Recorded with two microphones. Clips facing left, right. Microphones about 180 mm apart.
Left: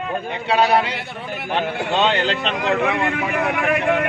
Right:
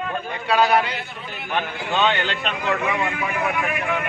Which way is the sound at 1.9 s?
30° left (ahead or behind).